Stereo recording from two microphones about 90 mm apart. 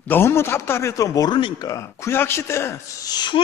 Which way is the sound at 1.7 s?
35° left (ahead or behind).